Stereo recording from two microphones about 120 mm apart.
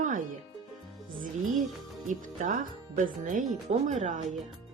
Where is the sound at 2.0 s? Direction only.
90° right.